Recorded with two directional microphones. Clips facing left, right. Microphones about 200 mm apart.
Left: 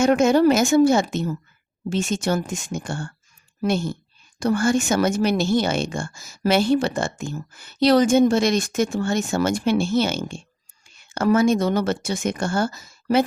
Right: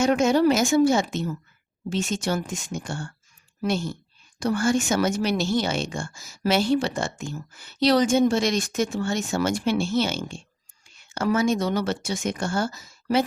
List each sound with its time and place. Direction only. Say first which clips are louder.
0.0 s speech: left 3 dB; 55° left (ahead or behind)